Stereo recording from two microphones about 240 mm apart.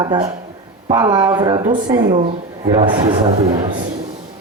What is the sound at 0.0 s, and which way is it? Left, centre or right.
Speech, centre.